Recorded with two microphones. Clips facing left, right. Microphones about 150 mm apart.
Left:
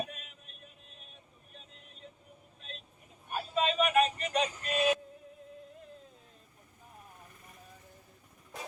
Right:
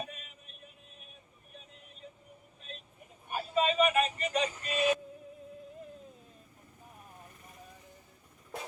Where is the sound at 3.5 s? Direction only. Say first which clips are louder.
Right 1 dB; 5° right (ahead or behind).